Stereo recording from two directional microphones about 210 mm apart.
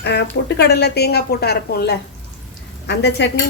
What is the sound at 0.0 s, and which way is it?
Speech, 55° left (ahead or behind).